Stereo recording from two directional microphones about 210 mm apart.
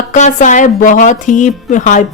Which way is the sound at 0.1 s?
35° left (ahead or behind).